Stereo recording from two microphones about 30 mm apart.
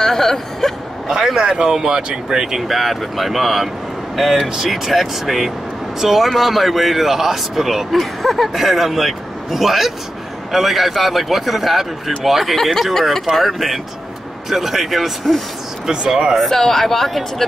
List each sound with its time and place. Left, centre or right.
0.0 s speech: centre
1.0 s a man's voice: centre
1.4 s speech: right
2.7 s speech: centre
16.3 s speech: centre